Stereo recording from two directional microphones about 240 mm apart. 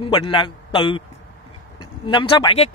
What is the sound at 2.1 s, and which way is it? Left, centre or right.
Speech, left.